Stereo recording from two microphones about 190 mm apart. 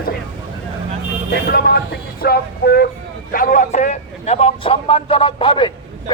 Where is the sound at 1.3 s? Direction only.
55° left (ahead or behind).